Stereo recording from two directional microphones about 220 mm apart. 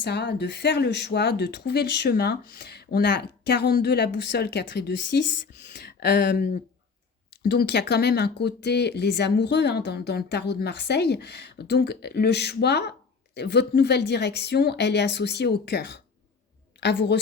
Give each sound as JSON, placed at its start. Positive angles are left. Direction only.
{"t": 0.0, "sound": "speech", "side_deg": 50}